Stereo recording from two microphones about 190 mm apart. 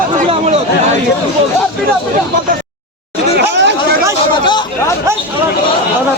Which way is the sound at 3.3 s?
70° right (ahead or behind).